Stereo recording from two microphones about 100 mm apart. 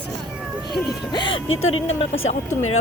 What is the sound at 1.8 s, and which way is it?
Speech, 90° left.